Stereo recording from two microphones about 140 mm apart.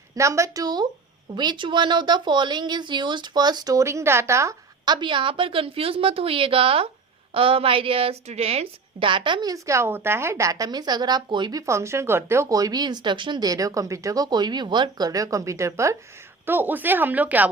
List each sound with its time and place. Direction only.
0.2 s a woman's voice: 20° right (ahead or behind)
4.9 s a woman's voice: 35° right (ahead or behind); by 17.5 s 10° right (ahead or behind)